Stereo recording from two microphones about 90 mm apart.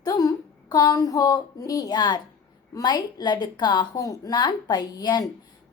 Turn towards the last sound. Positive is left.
turn(degrees=50)  # may be behind; listen again after turning